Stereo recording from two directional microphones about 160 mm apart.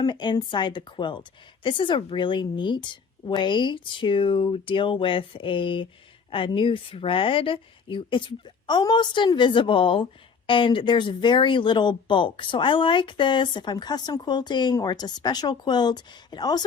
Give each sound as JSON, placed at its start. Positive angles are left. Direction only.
{"t": 0.0, "sound": "a woman's voice", "side_deg": 30}